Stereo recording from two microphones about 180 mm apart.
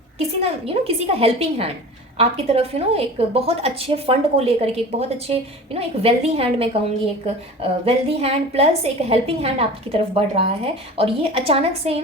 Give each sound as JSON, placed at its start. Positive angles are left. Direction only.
{"t": 0.2, "sound": "a woman's voice", "side_deg": -30}